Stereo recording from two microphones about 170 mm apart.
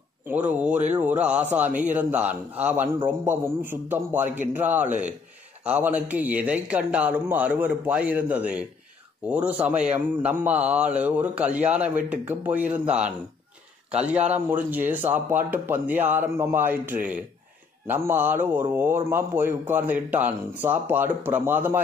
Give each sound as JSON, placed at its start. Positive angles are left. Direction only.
{"t": 0.3, "sound": "a man's voice", "side_deg": -10}